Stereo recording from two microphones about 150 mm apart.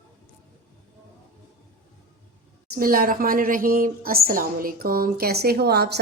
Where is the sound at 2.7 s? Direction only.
75° right (ahead or behind).